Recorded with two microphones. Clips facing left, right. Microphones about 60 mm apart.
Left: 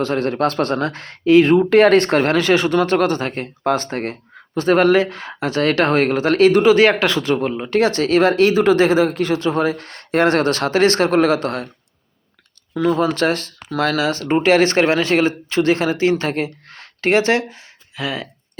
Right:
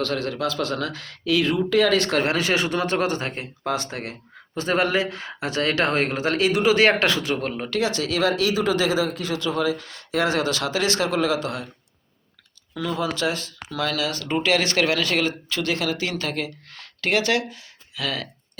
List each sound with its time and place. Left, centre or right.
0.2 s speech: left
2.0 s speech: left
12.7 s speech: left
13.9 s speech: left